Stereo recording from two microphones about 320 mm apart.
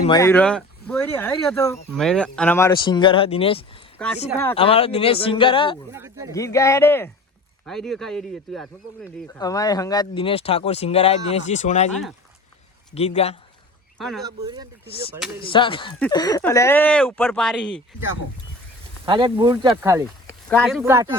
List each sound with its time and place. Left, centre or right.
0.1 s speech: centre
4.0 s speech: centre
5.9 s speech: centre
6.3 s speech: centre
12.9 s a man's voice: centre
14.3 s speech: centre
15.4 s speech: centre
19.0 s speech: centre
20.2 s speech: centre